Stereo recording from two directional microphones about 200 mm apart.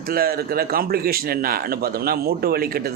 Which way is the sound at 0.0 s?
50° right (ahead or behind).